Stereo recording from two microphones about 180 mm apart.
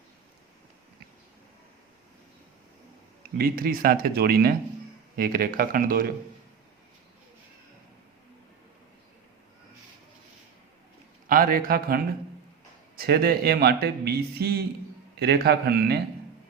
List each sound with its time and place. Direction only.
3.3 s a man's voice: 55° right (ahead or behind)
11.3 s a man's voice: 55° right (ahead or behind)